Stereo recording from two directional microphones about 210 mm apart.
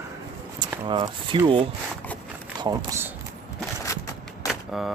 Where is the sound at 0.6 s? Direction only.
20° right (ahead or behind).